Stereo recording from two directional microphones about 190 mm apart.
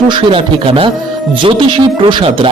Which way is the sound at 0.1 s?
25° right (ahead or behind).